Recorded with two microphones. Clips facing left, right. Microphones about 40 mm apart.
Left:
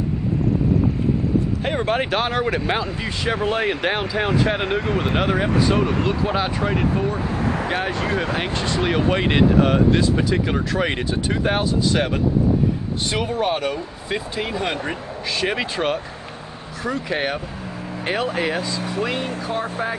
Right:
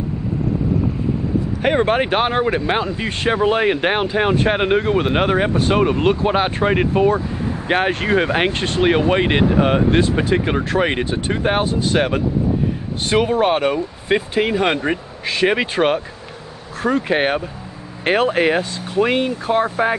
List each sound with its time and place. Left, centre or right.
1.6 s speech: right
9.0 s speech: centre; by 20.0 s right